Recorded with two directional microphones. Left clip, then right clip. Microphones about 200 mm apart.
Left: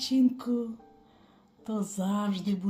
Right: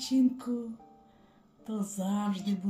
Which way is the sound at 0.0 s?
25° left (ahead or behind).